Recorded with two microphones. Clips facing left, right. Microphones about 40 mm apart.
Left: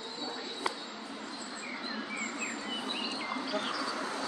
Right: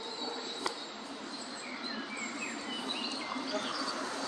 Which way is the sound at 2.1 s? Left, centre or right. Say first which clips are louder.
Left 2 dB; left.